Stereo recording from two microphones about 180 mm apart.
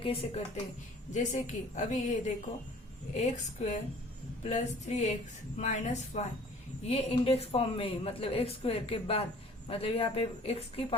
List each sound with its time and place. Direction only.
0.0 s a woman's voice: 35° left (ahead or behind)